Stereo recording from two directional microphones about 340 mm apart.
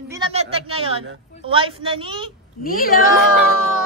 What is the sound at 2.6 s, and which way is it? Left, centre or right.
Speech, left.